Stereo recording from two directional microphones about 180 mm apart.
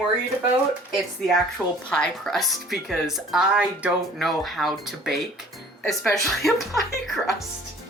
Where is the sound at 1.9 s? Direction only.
5° left (ahead or behind).